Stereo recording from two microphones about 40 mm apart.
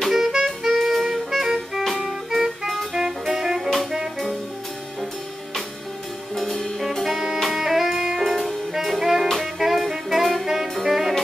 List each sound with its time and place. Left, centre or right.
0.0 s music: centre
0.3 s music: centre
0.7 s music: centre
2.9 s jazz: centre
6.3 s music: centre
6.9 s jazz: centre
7.4 s music: centre
8.2 s saxophone: centre